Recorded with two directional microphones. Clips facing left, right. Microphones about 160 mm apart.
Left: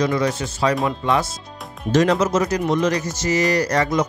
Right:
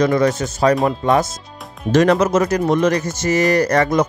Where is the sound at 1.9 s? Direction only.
60° right (ahead or behind).